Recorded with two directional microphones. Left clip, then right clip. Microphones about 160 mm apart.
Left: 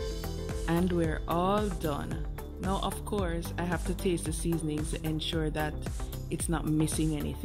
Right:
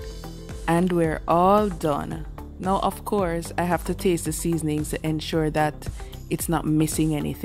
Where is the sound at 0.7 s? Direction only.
60° right (ahead or behind).